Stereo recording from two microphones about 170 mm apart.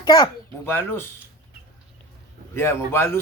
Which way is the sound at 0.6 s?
10° left (ahead or behind).